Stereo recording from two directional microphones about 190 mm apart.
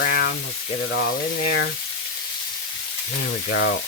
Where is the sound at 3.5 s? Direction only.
65° left (ahead or behind).